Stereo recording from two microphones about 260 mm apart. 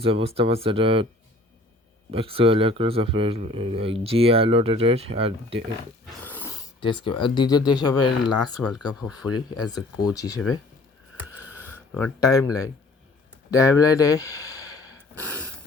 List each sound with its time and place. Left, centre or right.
0.0 s a man's voice: right
2.0 s a man's voice: right
6.2 s speech: centre
8.9 s speech: centre
9.6 s speech: centre
11.3 s a sound: centre
13.5 s speech: centre